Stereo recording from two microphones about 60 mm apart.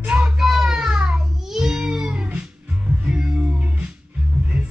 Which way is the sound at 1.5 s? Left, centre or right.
Centre.